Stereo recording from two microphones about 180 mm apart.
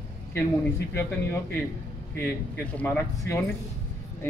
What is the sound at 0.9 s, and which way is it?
Speech, 15° left (ahead or behind).